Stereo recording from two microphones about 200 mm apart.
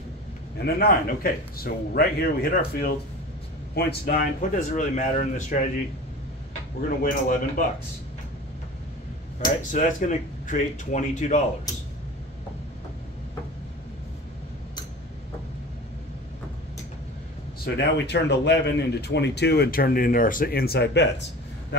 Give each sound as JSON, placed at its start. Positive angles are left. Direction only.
{"t": 0.6, "sound": "a man's voice", "side_deg": 50}
{"t": 7.0, "sound": "a man's voice", "side_deg": 45}
{"t": 9.7, "sound": "speech", "side_deg": 40}
{"t": 17.7, "sound": "speech", "side_deg": 60}